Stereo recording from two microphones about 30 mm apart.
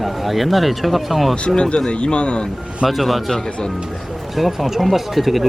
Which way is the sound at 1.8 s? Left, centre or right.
Left.